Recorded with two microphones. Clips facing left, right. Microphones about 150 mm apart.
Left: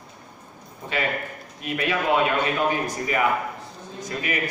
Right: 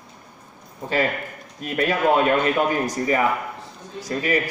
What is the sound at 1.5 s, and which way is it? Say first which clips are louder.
A man's voice: right 3 dB; 40° right (ahead or behind).